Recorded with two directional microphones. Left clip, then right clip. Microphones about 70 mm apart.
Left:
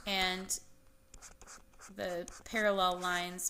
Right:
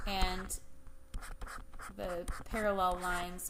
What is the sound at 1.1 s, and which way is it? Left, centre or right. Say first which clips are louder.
Writing: right 7 dB; left.